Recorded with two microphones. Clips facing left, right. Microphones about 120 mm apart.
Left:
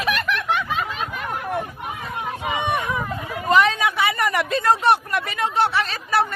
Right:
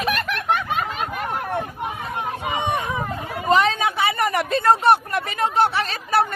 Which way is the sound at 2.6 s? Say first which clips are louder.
Left 1 dB; 25° right (ahead or behind).